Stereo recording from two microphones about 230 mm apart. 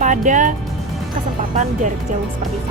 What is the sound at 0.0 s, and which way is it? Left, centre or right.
Speech, right.